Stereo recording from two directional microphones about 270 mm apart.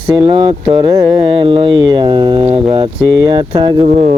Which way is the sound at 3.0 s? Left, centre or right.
Centre.